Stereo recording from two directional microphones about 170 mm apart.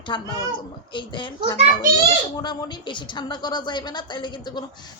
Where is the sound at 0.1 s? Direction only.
25° left (ahead or behind).